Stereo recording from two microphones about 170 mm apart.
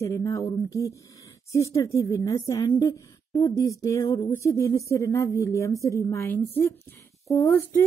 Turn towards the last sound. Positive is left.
turn(degrees=15)  # may be behind; listen again after turning